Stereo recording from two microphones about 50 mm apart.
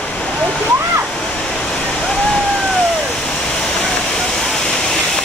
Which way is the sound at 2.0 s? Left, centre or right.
Centre.